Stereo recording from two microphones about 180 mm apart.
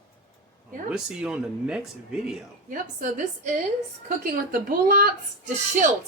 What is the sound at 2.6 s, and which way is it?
Speech, 45° right (ahead or behind).